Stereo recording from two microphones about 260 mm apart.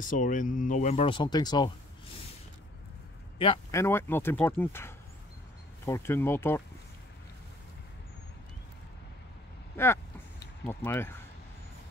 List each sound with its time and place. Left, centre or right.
0.0 s speech: left
3.3 s speech: centre
3.8 s speech: centre
10.6 s speech: centre